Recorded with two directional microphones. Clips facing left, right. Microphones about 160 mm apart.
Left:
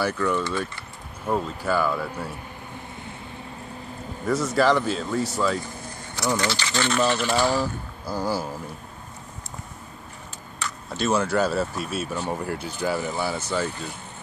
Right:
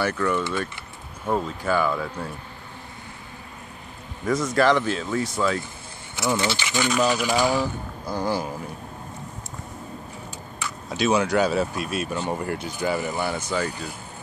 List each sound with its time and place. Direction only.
0.0 s speech: 5° left (ahead or behind)
4.3 s speech: 10° left (ahead or behind)
6.1 s speech: 25° right (ahead or behind)
8.0 s speech: 10° left (ahead or behind)
11.0 s speech: centre (ahead or behind)